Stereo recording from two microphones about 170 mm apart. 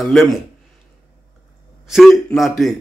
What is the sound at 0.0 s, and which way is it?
Speech, centre (ahead or behind).